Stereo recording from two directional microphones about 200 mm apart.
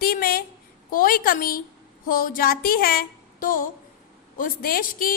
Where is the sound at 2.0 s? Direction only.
45° left (ahead or behind).